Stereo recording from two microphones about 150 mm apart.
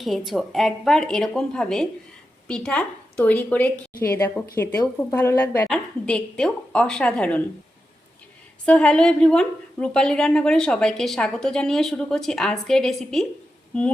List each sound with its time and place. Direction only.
0.3 s a woman's voice: centre (ahead or behind); by 5.6 s 15° left (ahead or behind)
5.6 s a woman's voice: 5° left (ahead or behind)
8.6 s a woman's voice: 5° left (ahead or behind)